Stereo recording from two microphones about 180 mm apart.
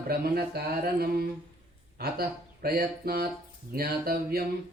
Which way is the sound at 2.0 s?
60° right (ahead or behind).